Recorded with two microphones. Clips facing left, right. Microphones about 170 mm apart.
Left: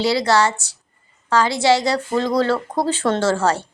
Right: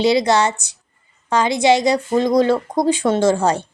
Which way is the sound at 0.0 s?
20° right (ahead or behind).